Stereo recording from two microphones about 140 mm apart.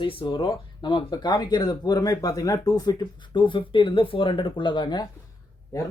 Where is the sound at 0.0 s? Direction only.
40° left (ahead or behind).